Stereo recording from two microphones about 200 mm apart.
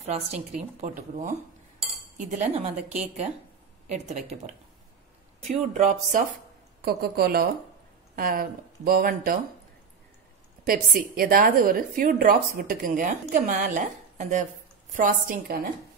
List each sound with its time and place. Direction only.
0.5 s speech: 40° right (ahead or behind)
3.9 s speech: 35° right (ahead or behind)
5.6 s speech: 35° right (ahead or behind)
6.8 s a woman's voice: 50° right (ahead or behind)
10.6 s a woman's voice: 45° right (ahead or behind)